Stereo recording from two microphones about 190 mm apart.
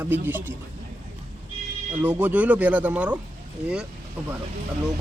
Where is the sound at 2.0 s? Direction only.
10° right (ahead or behind).